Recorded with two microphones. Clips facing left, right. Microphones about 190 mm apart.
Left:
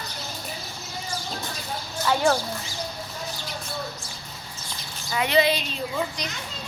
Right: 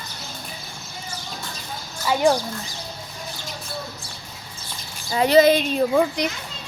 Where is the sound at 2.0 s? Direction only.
15° right (ahead or behind).